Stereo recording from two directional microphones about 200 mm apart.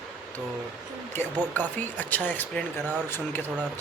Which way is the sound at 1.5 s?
10° left (ahead or behind).